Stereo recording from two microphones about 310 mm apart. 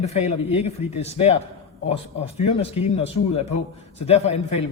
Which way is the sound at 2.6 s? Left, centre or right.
Centre.